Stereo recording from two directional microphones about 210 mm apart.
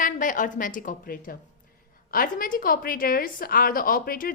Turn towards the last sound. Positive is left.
turn(degrees=45)  # may be behind; listen again after turning